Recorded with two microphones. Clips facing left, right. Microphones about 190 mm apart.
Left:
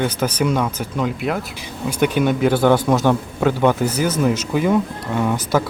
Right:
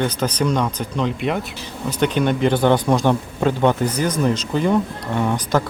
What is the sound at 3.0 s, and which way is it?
Speech, 10° right (ahead or behind).